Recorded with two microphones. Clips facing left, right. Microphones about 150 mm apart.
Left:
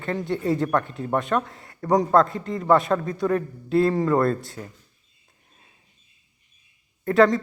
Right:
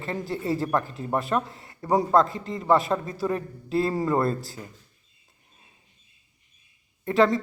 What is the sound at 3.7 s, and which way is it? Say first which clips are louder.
Speech: left 4 dB; 5° right (ahead or behind).